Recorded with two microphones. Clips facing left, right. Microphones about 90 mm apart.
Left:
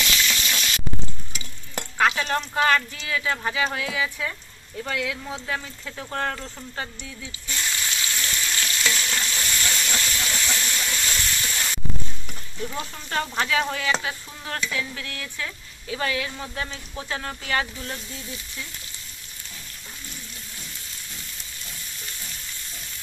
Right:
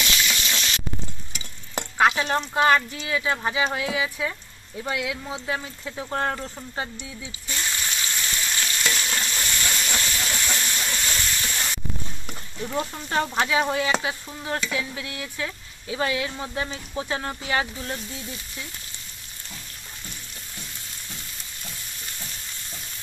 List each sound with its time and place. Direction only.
0.0 s spray: 25° right (ahead or behind)
1.8 s speech: 25° right (ahead or behind)
7.6 s frying: 25° right (ahead or behind)
8.8 s stir: 30° right (ahead or behind)
9.8 s steam: 30° right (ahead or behind)
12.7 s speech: 25° right (ahead or behind)